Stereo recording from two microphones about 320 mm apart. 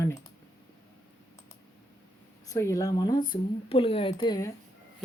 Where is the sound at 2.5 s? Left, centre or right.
Centre.